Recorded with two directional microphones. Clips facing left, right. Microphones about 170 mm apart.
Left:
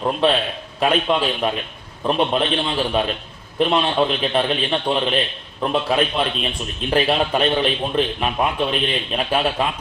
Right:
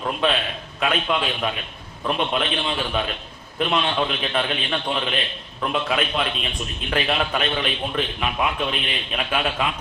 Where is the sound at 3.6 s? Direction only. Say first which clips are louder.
Left 4 dB; 35° left (ahead or behind).